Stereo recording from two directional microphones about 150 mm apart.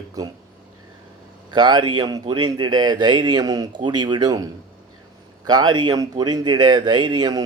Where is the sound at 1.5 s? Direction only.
30° right (ahead or behind).